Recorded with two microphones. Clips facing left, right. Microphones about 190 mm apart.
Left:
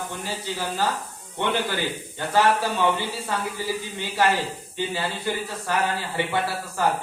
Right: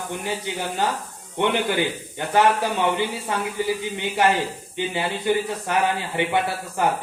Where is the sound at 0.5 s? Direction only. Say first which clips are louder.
Even; 20° right (ahead or behind).